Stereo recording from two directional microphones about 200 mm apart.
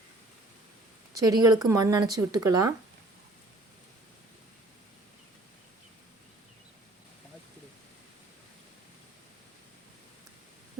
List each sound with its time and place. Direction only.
1.1 s speech: 20° right (ahead or behind)